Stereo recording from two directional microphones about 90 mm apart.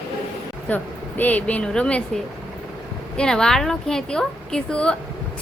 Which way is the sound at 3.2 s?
5° left (ahead or behind).